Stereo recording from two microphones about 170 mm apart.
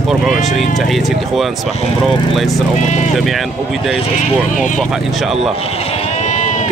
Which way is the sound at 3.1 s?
Centre (ahead or behind).